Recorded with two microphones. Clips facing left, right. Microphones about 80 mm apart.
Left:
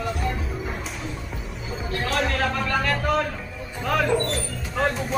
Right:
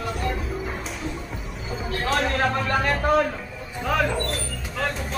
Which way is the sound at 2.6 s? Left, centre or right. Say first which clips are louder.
Right 1 dB; right.